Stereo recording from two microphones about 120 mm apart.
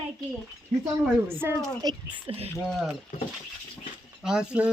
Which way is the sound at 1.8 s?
30° right (ahead or behind).